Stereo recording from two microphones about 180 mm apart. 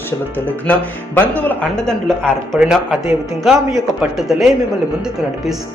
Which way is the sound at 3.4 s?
Centre (ahead or behind).